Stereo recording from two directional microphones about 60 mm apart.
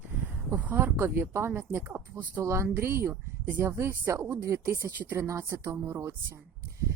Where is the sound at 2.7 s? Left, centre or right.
Right.